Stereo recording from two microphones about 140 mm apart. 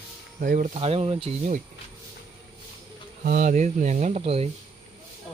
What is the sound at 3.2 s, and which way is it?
Speech, 70° right (ahead or behind).